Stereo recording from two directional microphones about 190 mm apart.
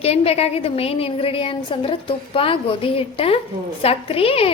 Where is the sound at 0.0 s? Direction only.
30° left (ahead or behind).